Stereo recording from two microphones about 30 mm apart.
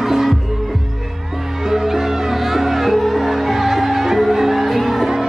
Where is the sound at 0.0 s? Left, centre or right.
Centre.